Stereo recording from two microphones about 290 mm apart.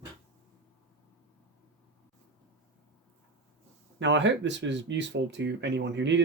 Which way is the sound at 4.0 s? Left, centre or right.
Right.